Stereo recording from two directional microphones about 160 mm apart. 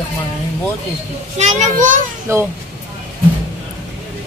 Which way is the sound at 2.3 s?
15° right (ahead or behind).